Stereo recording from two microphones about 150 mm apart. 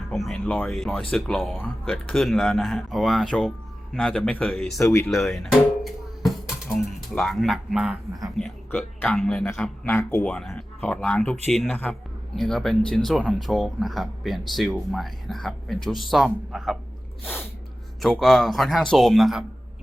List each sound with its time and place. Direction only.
0.1 s speech: centre (ahead or behind)
0.3 s speech: 10° left (ahead or behind)
0.7 s speech: centre (ahead or behind)
4.8 s speech: 20° left (ahead or behind)
5.0 s speech: centre (ahead or behind)
8.4 s speech: 10° left (ahead or behind)
9.8 s speech: 15° left (ahead or behind); by 16.7 s centre (ahead or behind)
18.0 s speech: centre (ahead or behind)